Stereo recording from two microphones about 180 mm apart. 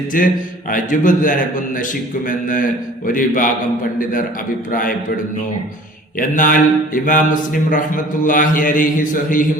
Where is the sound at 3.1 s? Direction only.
50° left (ahead or behind).